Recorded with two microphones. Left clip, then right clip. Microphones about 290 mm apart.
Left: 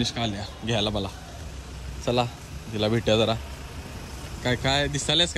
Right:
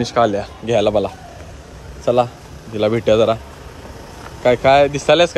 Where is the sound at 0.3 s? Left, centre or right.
Centre.